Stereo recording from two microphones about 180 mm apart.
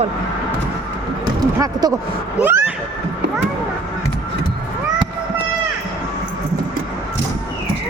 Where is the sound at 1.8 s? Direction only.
20° right (ahead or behind).